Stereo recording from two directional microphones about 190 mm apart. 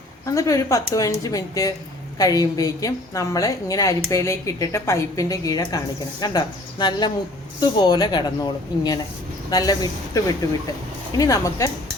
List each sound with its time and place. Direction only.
0.3 s a woman's voice: 15° left (ahead or behind)
11.2 s speech: 15° left (ahead or behind)